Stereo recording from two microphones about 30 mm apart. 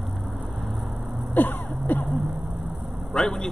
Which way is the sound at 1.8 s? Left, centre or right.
Left.